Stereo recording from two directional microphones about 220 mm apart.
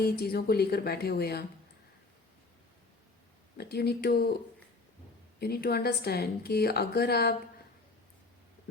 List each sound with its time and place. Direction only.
0.0 s a woman's voice: 45° left (ahead or behind)
3.6 s a woman's voice: 45° left (ahead or behind)
5.4 s a woman's voice: 45° left (ahead or behind)